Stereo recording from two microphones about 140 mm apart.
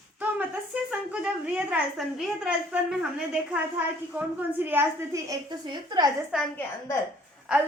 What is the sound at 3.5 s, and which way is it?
A woman's voice, 10° right (ahead or behind).